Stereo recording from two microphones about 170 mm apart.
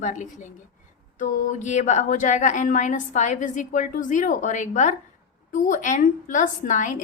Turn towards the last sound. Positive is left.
turn(degrees=50)  # may be behind; listen again after turning